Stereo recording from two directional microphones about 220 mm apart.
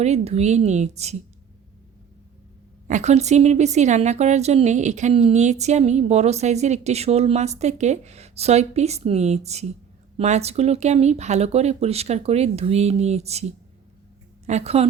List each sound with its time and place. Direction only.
0.0 s speech: 30° right (ahead or behind)
2.8 s a woman's voice: 30° right (ahead or behind)
14.4 s a woman's voice: 30° right (ahead or behind)